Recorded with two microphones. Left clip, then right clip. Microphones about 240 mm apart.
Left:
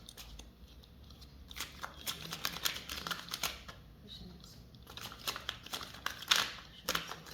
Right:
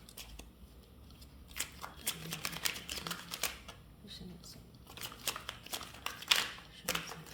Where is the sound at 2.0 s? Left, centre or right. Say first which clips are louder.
Left 1 dB; centre.